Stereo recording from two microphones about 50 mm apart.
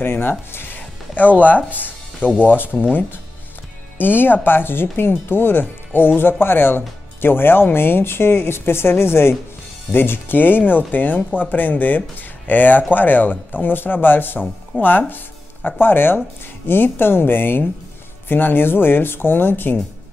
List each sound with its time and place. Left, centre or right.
0.0 s speech: left
4.0 s speech: left